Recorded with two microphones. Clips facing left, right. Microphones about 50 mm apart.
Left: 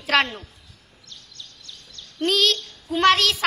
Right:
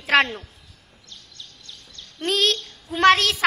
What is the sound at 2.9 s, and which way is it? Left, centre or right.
Speech, right.